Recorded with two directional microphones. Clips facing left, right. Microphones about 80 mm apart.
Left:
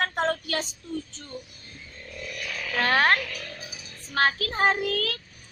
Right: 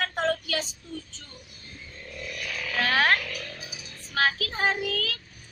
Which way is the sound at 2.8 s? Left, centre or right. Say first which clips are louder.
Left 2 dB; left.